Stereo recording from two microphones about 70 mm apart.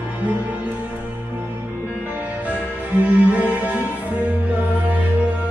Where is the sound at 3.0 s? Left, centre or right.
Right.